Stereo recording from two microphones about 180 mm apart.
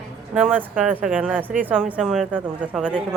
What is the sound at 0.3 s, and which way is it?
Speech, 10° right (ahead or behind).